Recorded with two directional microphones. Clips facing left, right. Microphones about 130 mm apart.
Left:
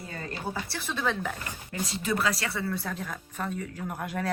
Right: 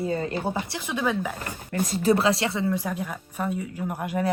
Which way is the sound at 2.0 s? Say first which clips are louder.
Right 8 dB; 30° right (ahead or behind).